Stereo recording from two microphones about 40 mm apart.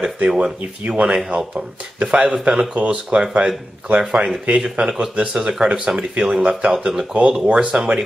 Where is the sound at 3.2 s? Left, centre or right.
Centre.